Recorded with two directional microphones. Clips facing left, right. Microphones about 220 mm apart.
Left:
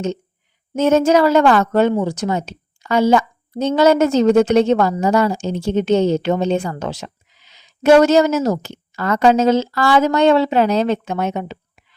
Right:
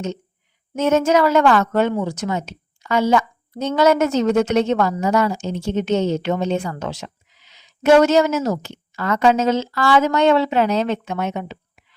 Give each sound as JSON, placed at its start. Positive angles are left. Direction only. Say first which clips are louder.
{"t": 0.8, "sound": "a woman's voice", "louder": "left 3 dB", "side_deg": 30}